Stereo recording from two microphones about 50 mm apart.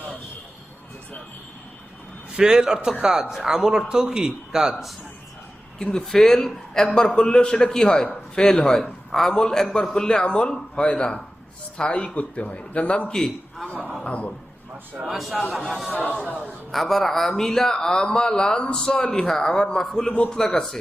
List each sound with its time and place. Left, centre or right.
2.3 s a man's voice: centre
4.7 s speech: centre
5.8 s a man's voice: centre; by 13.1 s left
13.1 s a man's voice: centre
14.0 s speech: left
15.0 s a man's voice: centre